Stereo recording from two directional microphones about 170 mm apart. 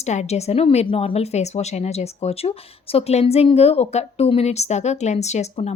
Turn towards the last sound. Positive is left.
turn(degrees=40)  # may be behind; listen again after turning